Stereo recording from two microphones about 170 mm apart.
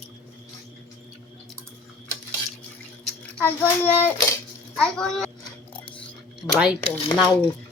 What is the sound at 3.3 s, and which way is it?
A child's voice, 10° left (ahead or behind).